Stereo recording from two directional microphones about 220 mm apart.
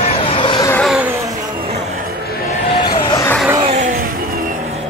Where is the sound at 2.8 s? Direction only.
20° left (ahead or behind).